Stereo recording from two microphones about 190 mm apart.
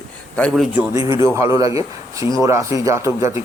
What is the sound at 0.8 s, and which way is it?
A man's voice, 15° right (ahead or behind).